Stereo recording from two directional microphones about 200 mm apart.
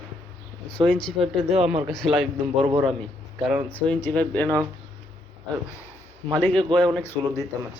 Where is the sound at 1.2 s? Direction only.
30° right (ahead or behind).